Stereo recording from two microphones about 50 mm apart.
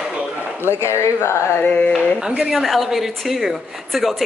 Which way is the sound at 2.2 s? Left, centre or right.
Centre.